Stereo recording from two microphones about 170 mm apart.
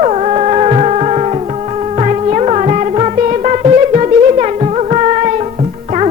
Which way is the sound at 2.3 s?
40° right (ahead or behind).